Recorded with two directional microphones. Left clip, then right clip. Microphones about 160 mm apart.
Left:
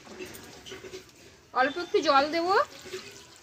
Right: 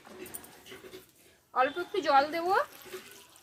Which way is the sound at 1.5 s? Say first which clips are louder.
Left 3 dB; 25° left (ahead or behind).